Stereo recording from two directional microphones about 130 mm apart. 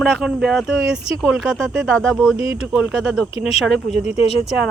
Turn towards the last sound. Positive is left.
turn(degrees=50)  # may be behind; listen again after turning